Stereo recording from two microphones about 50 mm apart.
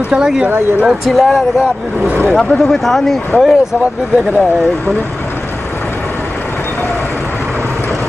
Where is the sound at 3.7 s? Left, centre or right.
Centre.